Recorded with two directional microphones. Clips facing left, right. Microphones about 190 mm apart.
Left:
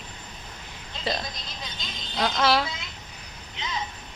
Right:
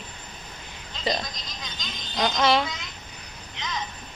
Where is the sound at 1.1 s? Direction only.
Centre (ahead or behind).